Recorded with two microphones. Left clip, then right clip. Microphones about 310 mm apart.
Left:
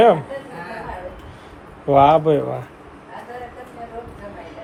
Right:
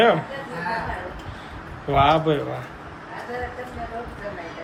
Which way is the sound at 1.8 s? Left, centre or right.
Centre.